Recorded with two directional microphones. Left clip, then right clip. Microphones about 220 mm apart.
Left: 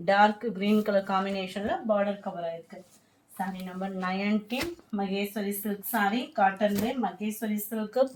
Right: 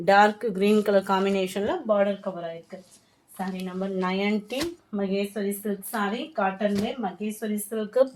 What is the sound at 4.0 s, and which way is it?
Speech, 40° right (ahead or behind).